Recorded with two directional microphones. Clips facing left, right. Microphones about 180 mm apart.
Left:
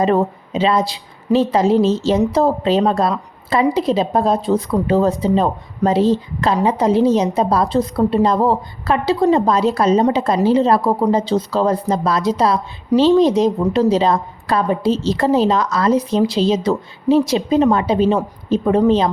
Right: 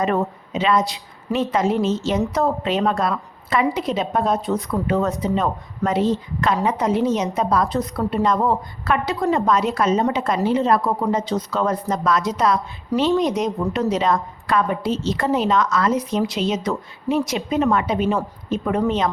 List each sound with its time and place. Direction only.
0.0 s a woman's voice: 30° left (ahead or behind)